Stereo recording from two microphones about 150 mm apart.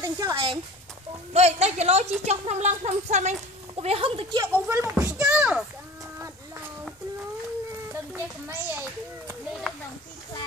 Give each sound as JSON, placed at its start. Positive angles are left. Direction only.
{"t": 0.0, "sound": "speech", "side_deg": -25}
{"t": 1.3, "sound": "a woman's voice", "side_deg": -45}
{"t": 3.7, "sound": "speech", "side_deg": -40}
{"t": 4.6, "sound": "speech", "side_deg": -15}
{"t": 7.9, "sound": "a child's voice", "side_deg": -15}